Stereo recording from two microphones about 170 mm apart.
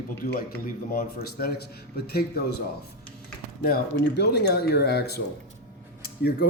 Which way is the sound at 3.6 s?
75° left (ahead or behind).